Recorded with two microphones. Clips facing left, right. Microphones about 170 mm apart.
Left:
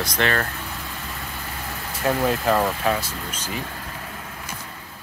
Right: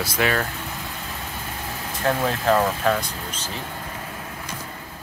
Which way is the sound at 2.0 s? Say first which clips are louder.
Even; 5° left (ahead or behind).